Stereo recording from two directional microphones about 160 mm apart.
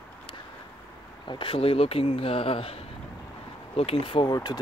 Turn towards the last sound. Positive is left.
turn(degrees=25)  # may be behind; listen again after turning